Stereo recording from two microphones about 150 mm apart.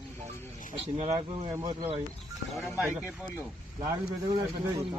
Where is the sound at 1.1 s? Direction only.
30° right (ahead or behind).